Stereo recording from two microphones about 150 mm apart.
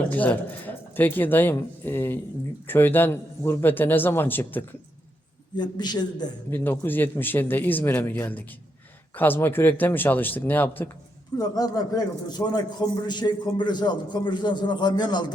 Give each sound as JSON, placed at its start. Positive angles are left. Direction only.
{"t": 0.1, "sound": "speech", "side_deg": 10}
{"t": 5.5, "sound": "a man's voice", "side_deg": 30}
{"t": 6.5, "sound": "speech", "side_deg": 15}
{"t": 11.3, "sound": "a man's voice", "side_deg": 25}